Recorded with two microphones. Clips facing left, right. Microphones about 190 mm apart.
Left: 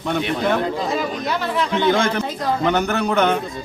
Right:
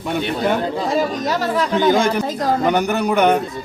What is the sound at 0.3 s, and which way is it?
A man's voice, 35° right (ahead or behind).